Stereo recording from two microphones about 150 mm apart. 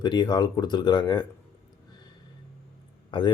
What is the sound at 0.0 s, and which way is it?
A man's voice, 30° left (ahead or behind).